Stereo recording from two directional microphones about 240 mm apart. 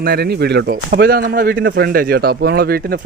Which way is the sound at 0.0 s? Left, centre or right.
Right.